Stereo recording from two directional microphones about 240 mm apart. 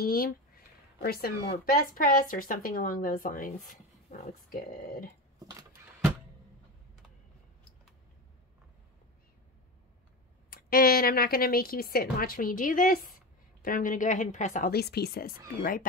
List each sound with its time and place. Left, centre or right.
0.0 s speech: left
10.5 s speech: left